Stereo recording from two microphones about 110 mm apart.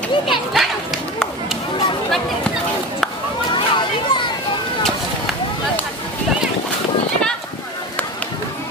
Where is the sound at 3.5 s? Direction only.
45° left (ahead or behind).